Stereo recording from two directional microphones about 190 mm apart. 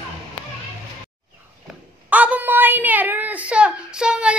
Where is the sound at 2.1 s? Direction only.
10° right (ahead or behind).